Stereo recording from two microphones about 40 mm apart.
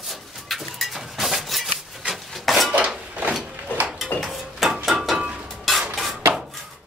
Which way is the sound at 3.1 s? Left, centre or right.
Right.